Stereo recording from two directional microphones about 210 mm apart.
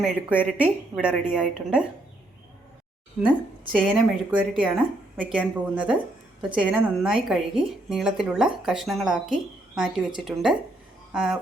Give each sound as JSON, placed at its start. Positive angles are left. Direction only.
{"t": 0.0, "sound": "speech", "side_deg": -5}
{"t": 3.8, "sound": "a woman's voice", "side_deg": -5}